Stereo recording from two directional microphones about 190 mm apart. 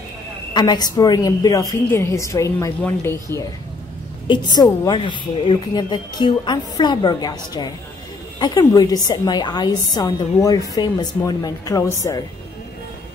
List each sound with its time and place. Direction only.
0.5 s a woman's voice: 20° left (ahead or behind)
4.3 s a woman's voice: 20° left (ahead or behind)